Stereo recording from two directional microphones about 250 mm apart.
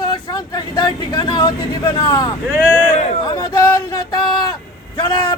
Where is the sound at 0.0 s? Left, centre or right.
Centre.